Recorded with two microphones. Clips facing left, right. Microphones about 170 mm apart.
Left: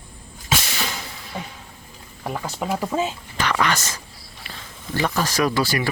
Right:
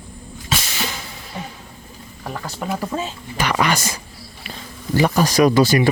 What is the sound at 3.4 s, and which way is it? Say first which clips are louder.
Speech: right 2 dB; 10° right (ahead or behind).